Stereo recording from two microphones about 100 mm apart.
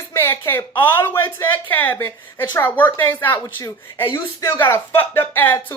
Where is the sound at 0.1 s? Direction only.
25° left (ahead or behind).